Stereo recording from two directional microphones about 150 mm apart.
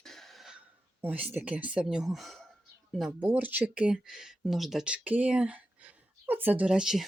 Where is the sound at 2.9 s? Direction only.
Centre (ahead or behind).